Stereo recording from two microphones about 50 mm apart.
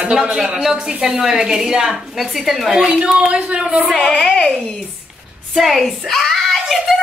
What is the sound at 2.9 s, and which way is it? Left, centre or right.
Speech, right.